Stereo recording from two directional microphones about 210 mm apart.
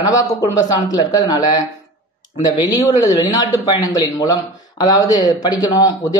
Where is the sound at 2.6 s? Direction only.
20° left (ahead or behind).